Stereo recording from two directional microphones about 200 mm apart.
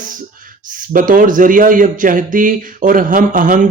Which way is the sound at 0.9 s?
45° right (ahead or behind).